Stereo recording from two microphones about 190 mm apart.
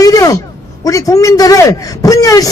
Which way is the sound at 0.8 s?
20° left (ahead or behind).